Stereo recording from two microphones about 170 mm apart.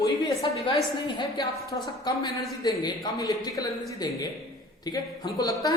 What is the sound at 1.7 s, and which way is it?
A man's voice, 25° left (ahead or behind).